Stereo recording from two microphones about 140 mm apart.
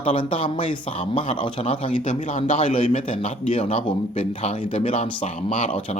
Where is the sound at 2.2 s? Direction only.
55° left (ahead or behind).